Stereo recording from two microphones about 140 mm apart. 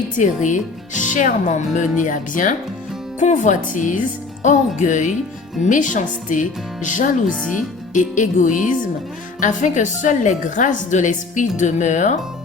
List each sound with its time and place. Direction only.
0.2 s a woman's voice: 60° left (ahead or behind)